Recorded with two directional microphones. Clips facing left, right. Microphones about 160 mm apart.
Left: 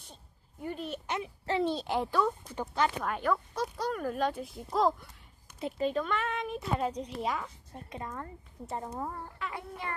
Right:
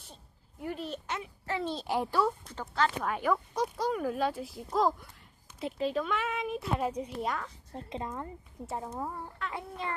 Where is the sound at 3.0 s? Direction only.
5° right (ahead or behind).